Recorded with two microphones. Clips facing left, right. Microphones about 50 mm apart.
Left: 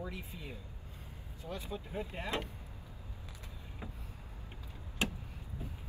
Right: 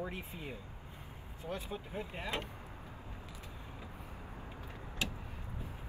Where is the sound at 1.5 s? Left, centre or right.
Right.